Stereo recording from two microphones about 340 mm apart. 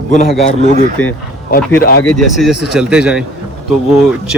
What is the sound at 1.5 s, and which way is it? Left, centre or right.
Speech, left.